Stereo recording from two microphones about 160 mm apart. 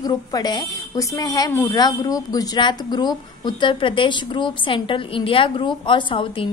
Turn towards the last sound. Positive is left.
turn(degrees=35)  # may be behind; listen again after turning